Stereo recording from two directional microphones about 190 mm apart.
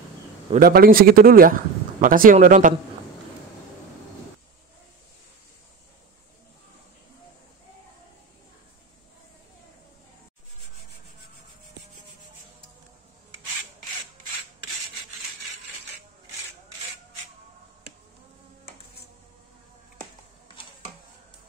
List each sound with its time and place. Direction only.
0.6 s speech: 50° right (ahead or behind)